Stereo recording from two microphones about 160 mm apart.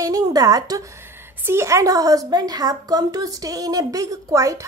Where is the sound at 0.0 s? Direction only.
25° right (ahead or behind).